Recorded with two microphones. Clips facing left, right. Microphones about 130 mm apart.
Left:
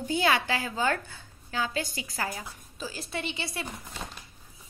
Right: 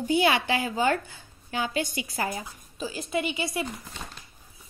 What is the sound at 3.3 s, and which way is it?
Speech, 20° right (ahead or behind).